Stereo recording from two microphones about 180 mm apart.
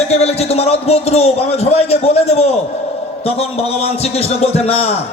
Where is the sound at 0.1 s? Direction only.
35° left (ahead or behind).